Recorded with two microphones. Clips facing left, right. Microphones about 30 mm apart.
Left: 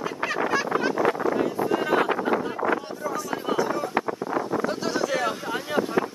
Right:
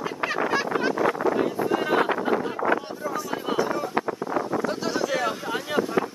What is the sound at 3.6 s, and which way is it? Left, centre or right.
Boat, centre.